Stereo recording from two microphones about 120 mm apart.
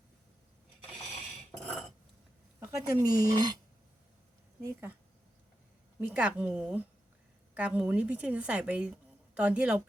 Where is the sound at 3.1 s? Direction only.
35° right (ahead or behind).